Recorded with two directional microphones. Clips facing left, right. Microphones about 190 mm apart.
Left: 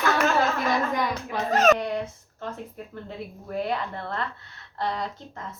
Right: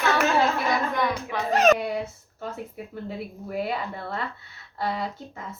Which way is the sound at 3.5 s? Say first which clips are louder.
Left 1 dB; 5° right (ahead or behind).